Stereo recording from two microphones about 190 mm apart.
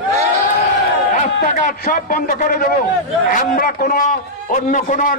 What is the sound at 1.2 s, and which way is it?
A man's voice, 45° left (ahead or behind).